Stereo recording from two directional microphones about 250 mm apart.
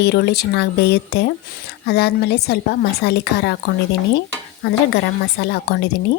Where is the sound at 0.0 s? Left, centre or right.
Left.